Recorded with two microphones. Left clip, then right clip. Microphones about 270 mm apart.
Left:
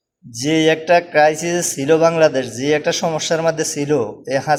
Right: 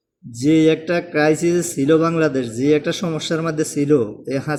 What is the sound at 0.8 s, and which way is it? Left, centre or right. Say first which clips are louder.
Speech: left 6 dB; centre.